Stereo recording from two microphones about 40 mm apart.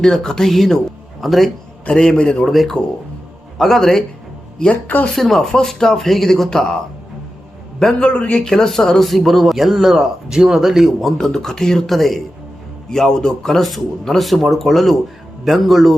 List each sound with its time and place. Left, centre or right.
0.0 s speech: centre
1.9 s speech: centre
2.5 s speech: centre
3.8 s speech: centre
4.7 s speech: left
5.1 s speech: centre
7.9 s speech: left
8.4 s speech: centre
11.2 s speech: centre